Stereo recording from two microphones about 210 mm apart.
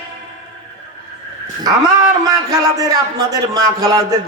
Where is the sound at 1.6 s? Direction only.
15° right (ahead or behind).